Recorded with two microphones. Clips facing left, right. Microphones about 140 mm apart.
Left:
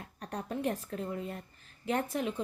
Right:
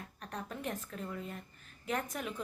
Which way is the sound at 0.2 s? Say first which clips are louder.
Left 7 dB; 35° left (ahead or behind).